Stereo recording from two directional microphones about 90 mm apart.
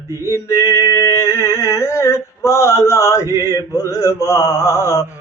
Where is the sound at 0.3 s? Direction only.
35° left (ahead or behind).